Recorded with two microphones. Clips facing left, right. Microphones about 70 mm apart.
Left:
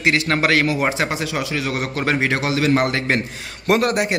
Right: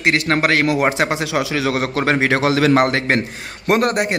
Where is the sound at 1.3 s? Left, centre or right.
Right.